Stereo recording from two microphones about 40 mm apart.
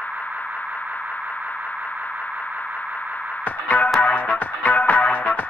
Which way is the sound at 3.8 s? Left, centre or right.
Centre.